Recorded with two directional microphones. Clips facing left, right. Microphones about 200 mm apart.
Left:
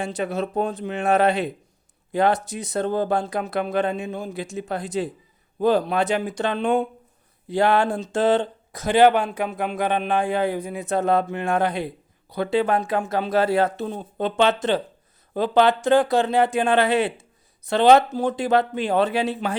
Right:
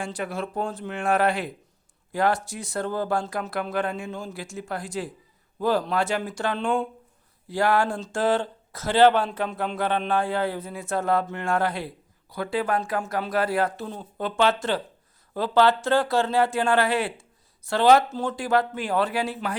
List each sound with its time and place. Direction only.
0.0 s speech: 20° left (ahead or behind)